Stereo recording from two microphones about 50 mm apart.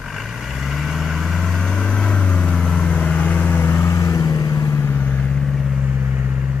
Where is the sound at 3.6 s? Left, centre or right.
Left.